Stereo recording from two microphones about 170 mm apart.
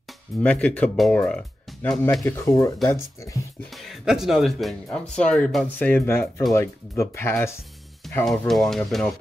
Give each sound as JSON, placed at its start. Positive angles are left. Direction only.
{"t": 0.4, "sound": "speech", "side_deg": 10}
{"t": 3.7, "sound": "speech", "side_deg": 0}